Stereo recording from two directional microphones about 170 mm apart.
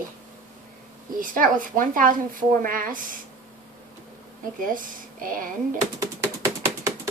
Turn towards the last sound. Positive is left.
turn(degrees=-20)  # may be behind; listen again after turning